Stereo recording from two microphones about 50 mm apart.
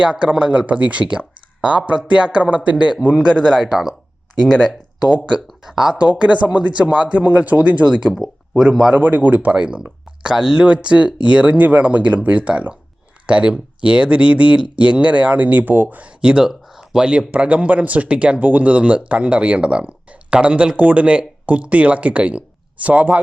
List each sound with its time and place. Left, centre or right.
0.0 s speech: right
3.6 s speech: centre
5.7 s speech: centre
6.0 s speech: right
16.2 s speech: centre
16.5 s a sound: centre
17.3 s speech: right